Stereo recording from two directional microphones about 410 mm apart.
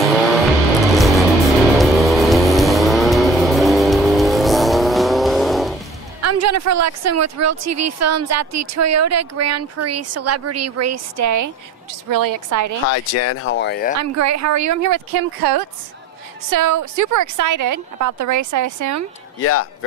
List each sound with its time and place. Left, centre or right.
0.9 s music: centre
1.8 s vehicle: centre
6.2 s a woman's voice: right
12.8 s speech: left
13.9 s a woman's voice: right
19.4 s speech: left